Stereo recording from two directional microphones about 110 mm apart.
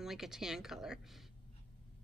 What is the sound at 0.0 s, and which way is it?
Speech, 5° right (ahead or behind).